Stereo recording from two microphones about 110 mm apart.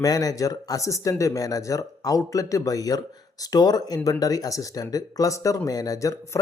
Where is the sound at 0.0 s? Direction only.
35° left (ahead or behind).